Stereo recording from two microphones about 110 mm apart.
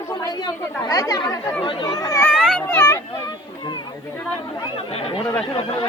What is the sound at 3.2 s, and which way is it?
Children playing, 40° left (ahead or behind).